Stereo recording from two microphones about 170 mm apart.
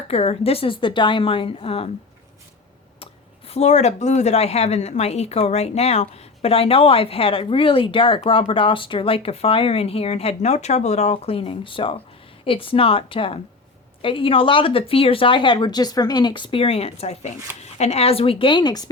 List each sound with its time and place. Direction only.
0.1 s speech: 35° left (ahead or behind)
3.0 s speech: 35° left (ahead or behind)